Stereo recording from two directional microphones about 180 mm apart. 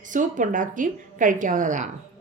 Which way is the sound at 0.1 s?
45° right (ahead or behind).